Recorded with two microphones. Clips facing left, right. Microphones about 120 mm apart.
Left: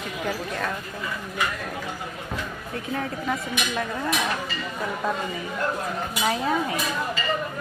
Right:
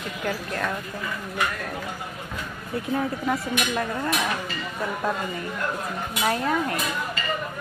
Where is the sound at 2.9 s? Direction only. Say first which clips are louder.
Right 3 dB; 5° right (ahead or behind).